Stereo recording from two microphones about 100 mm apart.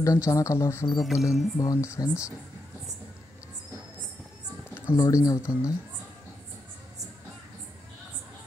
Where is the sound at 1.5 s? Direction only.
35° left (ahead or behind).